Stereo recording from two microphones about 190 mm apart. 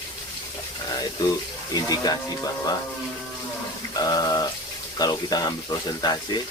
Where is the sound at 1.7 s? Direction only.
20° left (ahead or behind).